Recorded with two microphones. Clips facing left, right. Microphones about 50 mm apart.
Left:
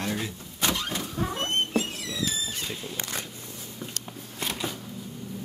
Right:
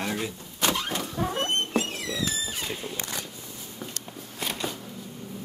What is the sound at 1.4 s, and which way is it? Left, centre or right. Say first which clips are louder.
Rodents: left 1 dB; right.